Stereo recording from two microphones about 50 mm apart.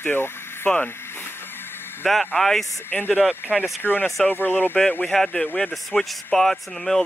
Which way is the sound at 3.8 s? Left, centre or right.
Left.